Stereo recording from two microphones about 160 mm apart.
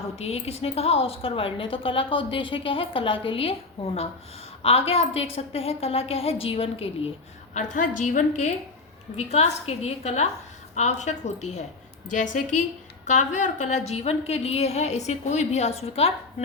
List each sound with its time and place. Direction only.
0.2 s a woman's voice: 40° left (ahead or behind)
7.5 s a woman's voice: 50° left (ahead or behind)